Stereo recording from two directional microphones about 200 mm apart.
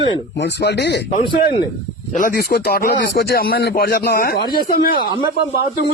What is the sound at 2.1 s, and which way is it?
Speech, 45° left (ahead or behind).